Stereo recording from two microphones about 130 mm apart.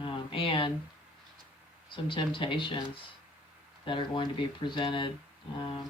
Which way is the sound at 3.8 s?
40° left (ahead or behind).